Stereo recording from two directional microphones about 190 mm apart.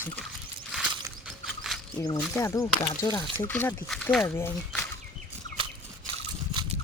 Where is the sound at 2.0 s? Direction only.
15° left (ahead or behind).